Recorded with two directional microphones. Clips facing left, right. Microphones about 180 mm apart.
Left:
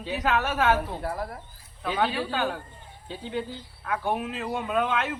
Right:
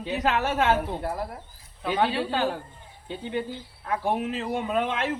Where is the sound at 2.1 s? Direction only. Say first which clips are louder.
Right 2 dB; 30° right (ahead or behind).